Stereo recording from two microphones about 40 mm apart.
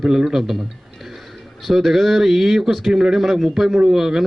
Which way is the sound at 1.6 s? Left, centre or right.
Centre.